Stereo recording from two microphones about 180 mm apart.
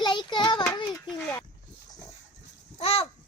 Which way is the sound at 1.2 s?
10° left (ahead or behind).